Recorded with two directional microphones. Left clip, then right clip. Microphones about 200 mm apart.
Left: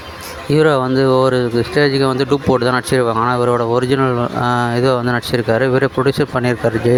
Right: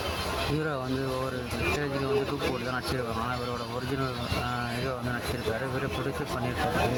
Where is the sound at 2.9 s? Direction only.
50° left (ahead or behind).